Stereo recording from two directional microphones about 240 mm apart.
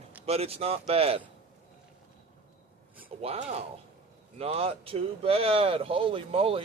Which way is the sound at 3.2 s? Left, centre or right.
Right.